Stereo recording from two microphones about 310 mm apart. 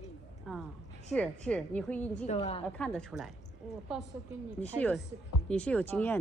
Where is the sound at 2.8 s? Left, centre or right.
Centre.